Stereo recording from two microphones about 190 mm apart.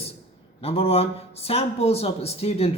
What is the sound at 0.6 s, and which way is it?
Speech, 30° left (ahead or behind).